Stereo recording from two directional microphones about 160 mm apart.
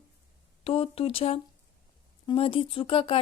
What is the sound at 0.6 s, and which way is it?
Speech, 35° left (ahead or behind).